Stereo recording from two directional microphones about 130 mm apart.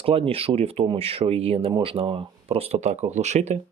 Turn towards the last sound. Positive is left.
turn(degrees=-60)  # may be behind; listen again after turning